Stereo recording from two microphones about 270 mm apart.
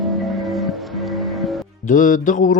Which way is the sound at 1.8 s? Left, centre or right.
Left.